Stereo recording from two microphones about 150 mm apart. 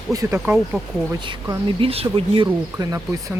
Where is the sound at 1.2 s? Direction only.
35° right (ahead or behind).